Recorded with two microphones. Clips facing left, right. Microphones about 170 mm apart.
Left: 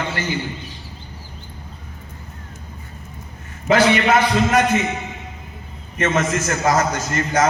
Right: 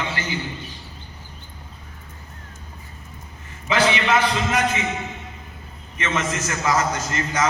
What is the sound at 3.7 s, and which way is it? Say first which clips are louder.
Speech: left 5 dB; 45° left (ahead or behind).